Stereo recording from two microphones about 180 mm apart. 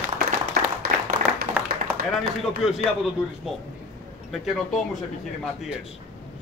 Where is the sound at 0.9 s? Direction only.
50° right (ahead or behind).